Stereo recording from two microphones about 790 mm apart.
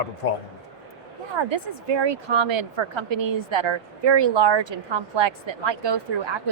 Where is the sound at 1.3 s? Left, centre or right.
Right.